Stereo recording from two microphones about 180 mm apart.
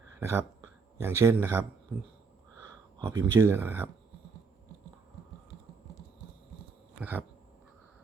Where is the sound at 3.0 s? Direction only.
15° right (ahead or behind).